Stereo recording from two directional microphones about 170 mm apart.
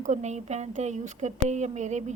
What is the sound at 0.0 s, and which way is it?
A woman's voice, 45° right (ahead or behind).